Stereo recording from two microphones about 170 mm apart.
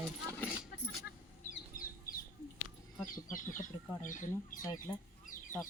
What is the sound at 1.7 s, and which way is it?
Chicken, 55° left (ahead or behind).